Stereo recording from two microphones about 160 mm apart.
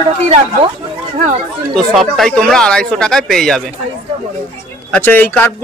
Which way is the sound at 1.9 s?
Centre (ahead or behind).